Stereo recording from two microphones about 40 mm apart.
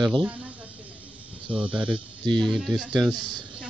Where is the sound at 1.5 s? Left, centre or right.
Right.